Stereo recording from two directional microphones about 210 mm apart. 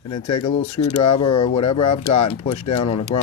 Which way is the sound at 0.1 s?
25° left (ahead or behind).